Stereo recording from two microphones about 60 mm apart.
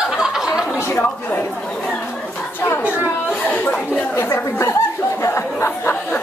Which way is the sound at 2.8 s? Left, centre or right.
Right.